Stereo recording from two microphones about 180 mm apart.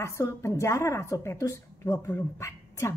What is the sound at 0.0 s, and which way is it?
Speech, 15° left (ahead or behind).